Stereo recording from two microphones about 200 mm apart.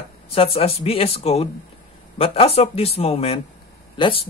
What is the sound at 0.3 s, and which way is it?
Speech, 30° left (ahead or behind).